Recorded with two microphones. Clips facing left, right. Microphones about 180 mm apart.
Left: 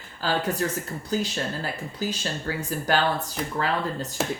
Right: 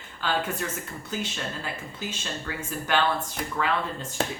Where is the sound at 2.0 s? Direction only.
35° left (ahead or behind).